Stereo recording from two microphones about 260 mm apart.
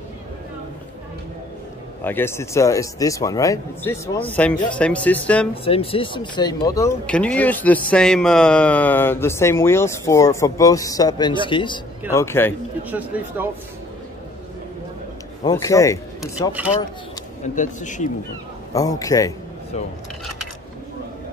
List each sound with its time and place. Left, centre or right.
2.0 s speech: centre
5.5 s speech: left
12.9 s speech: centre
15.4 s speech: centre
16.2 s speech: centre
17.6 s speech: left
18.7 s speech: centre